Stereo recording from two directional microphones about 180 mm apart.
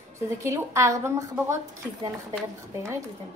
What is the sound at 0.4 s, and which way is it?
A woman's voice, 15° right (ahead or behind).